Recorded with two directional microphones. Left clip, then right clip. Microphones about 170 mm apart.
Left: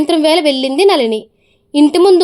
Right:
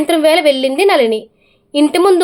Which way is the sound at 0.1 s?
45° left (ahead or behind).